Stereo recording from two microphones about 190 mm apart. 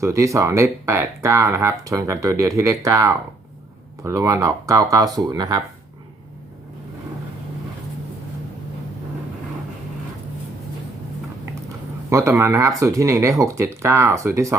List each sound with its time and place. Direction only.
0.0 s speech: 15° right (ahead or behind)
12.1 s speech: 15° right (ahead or behind)